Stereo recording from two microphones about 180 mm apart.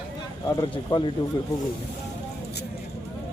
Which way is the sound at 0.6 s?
25° left (ahead or behind).